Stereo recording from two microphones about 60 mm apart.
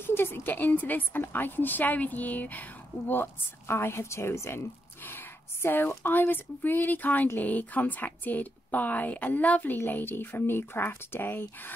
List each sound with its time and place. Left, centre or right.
0.0 s a woman's voice: left